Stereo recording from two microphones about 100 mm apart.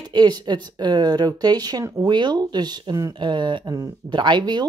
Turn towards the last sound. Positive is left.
turn(degrees=-50)  # may be behind; listen again after turning